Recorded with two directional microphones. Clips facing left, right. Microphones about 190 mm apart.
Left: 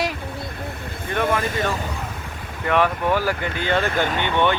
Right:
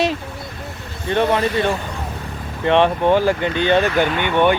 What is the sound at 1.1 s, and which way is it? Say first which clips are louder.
Speech: right 5 dB; 25° right (ahead or behind).